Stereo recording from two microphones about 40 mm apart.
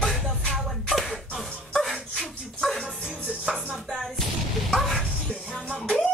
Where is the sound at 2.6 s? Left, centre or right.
Centre.